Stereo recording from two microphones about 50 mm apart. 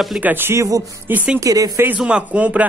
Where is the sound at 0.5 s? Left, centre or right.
Right.